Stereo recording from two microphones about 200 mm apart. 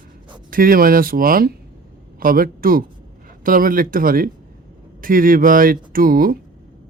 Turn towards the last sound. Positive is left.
turn(degrees=-45)  # may be behind; listen again after turning